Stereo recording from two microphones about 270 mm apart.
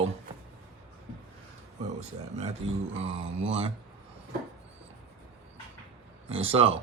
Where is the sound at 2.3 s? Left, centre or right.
Right.